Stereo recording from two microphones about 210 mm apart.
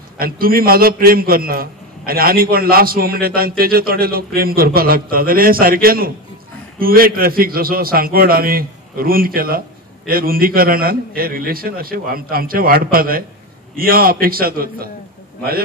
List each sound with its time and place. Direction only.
0.2 s a man's voice: 45° right (ahead or behind)